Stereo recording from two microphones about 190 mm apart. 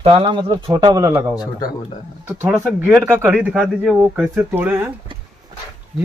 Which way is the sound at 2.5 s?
10° right (ahead or behind).